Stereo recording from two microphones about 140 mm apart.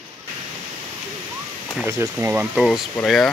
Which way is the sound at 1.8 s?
15° right (ahead or behind).